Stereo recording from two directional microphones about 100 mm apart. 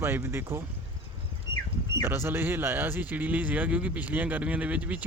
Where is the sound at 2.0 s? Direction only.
25° right (ahead or behind).